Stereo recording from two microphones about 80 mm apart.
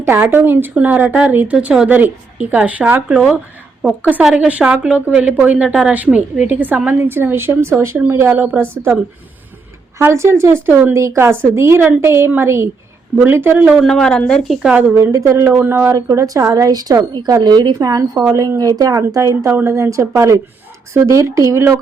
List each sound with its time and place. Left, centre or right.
0.0 s a woman's voice: right
1.5 s a woman's voice: centre
1.9 s a woman's voice: right
10.1 s speech: right
10.9 s a woman's voice: right
13.7 s a woman's voice: centre
14.7 s a woman's voice: centre
14.9 s speech: right
15.4 s a woman's voice: right
16.0 s a woman's voice: right
19.5 s speech: right